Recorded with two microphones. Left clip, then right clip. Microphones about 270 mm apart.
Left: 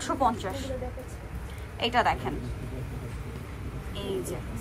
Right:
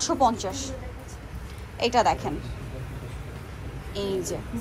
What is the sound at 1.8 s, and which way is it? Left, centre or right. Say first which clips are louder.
Speech: right 3 dB; centre.